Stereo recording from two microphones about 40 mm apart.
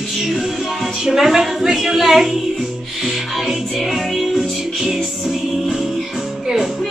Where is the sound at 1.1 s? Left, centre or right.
Centre.